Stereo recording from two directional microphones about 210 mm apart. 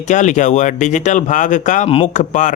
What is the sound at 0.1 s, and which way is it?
Speech, 35° left (ahead or behind).